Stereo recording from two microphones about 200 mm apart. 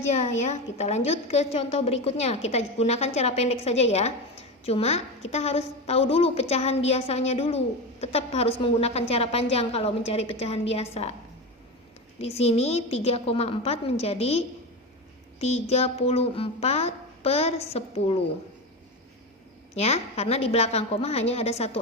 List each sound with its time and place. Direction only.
0.1 s a woman's voice: 35° left (ahead or behind)
12.2 s a woman's voice: 30° left (ahead or behind)
19.7 s a woman's voice: 35° left (ahead or behind)